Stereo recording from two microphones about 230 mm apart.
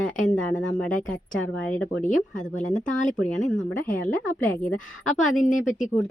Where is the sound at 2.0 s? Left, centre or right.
Left.